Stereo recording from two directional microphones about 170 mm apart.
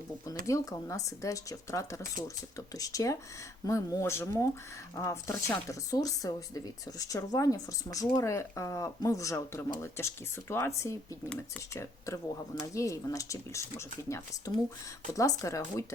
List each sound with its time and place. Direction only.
0.4 s speech: 20° left (ahead or behind)